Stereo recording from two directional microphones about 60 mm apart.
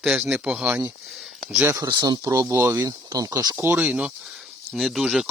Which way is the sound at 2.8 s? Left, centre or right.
Right.